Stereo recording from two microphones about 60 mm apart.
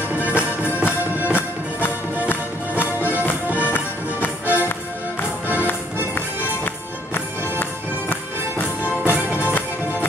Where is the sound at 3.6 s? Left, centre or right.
Left.